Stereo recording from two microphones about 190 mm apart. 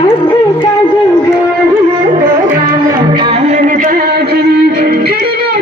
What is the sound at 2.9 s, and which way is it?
Music, 25° right (ahead or behind).